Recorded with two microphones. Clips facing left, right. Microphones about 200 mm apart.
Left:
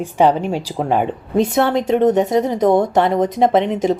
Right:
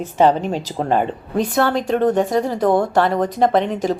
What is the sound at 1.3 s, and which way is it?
A woman's voice, 25° left (ahead or behind).